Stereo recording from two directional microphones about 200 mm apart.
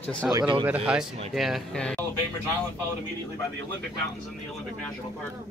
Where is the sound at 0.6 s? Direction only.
5° right (ahead or behind).